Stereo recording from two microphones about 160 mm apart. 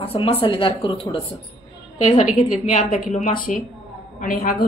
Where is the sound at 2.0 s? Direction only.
45° left (ahead or behind).